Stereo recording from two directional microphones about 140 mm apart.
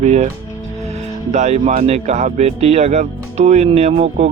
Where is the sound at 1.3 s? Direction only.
55° right (ahead or behind).